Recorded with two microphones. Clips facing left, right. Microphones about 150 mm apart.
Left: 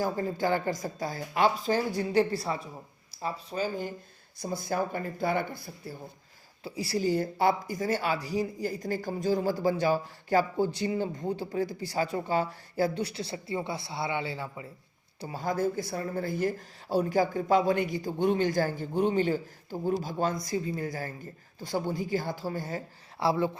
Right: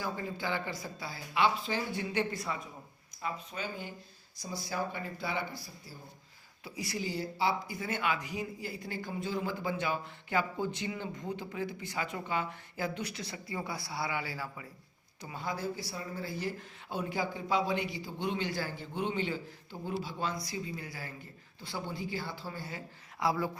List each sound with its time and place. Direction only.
0.0 s speech: 40° left (ahead or behind)
4.4 s speech: 55° left (ahead or behind)
6.7 s speech: 30° left (ahead or behind)
15.2 s speech: 40° left (ahead or behind)
23.2 s speech: 25° left (ahead or behind)